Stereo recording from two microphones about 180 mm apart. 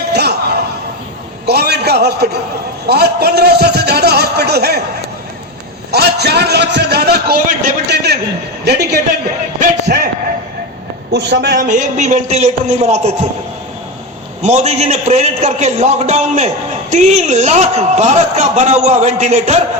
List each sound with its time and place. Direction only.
0.1 s music: 65° right (ahead or behind)
1.5 s a man's voice: 60° right (ahead or behind)
5.9 s a man's voice: 65° right (ahead or behind)
7.9 s a sound: 65° right (ahead or behind)
8.6 s a man's voice: 65° right (ahead or behind)
9.6 s speech: 50° right (ahead or behind)
11.1 s a woman's voice: 70° right (ahead or behind)
11.5 s speech: 45° right (ahead or behind)
14.4 s speech: 40° right (ahead or behind)